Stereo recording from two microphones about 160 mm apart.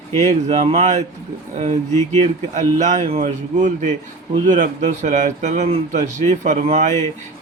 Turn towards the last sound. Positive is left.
turn(degrees=-45)  # may be behind; listen again after turning